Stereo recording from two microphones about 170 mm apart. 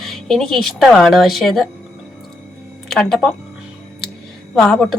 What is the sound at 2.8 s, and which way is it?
Speech, centre (ahead or behind).